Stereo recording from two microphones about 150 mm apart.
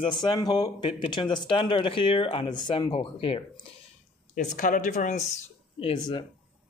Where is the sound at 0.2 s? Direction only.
30° left (ahead or behind).